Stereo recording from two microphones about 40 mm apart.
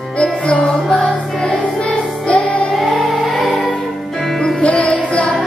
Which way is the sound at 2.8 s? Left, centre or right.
Centre.